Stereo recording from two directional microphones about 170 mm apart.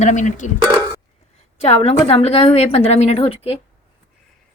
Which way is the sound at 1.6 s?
35° left (ahead or behind).